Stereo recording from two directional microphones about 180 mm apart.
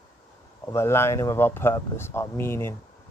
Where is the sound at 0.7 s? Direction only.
15° left (ahead or behind).